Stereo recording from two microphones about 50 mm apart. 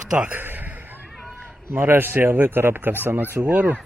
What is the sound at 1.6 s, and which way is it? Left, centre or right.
A man's voice, right.